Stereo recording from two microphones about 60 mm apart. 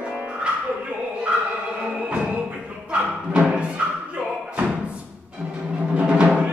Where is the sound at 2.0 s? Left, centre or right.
Centre.